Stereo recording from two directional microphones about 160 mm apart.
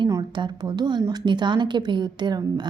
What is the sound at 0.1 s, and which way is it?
A woman's voice, 25° right (ahead or behind).